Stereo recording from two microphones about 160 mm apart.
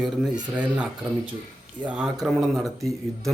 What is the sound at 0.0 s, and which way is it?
A man's voice, 5° right (ahead or behind).